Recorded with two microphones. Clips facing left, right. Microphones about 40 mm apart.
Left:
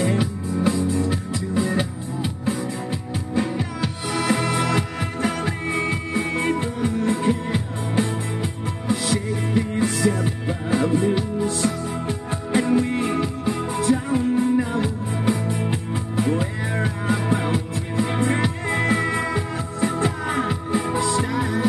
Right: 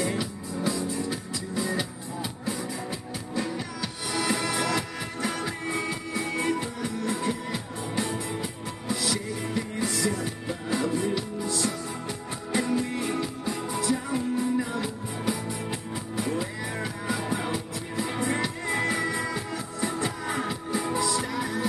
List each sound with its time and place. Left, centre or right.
0.0 s music: left